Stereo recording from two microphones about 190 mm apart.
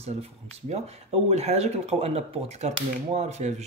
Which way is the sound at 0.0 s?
35° right (ahead or behind).